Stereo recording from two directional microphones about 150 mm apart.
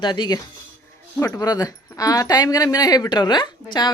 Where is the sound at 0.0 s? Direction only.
30° left (ahead or behind).